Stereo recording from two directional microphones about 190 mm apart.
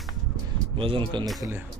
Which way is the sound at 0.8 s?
25° right (ahead or behind).